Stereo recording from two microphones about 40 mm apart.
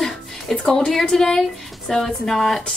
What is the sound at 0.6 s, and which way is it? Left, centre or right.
Speech, centre.